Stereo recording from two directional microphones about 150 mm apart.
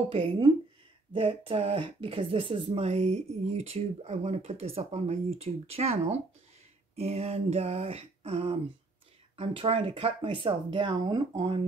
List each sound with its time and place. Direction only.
0.1 s speech: 40° right (ahead or behind)